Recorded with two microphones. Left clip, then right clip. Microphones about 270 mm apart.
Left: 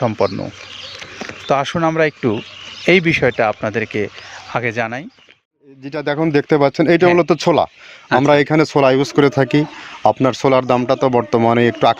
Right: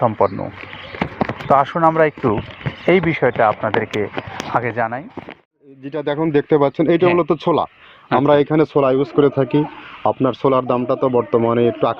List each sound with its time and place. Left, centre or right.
0.0 s speech: left
1.5 s speech: left